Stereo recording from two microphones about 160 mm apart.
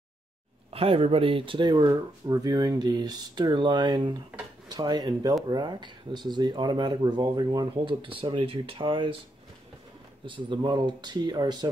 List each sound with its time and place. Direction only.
0.7 s speech: 35° right (ahead or behind)
10.2 s speech: 30° right (ahead or behind)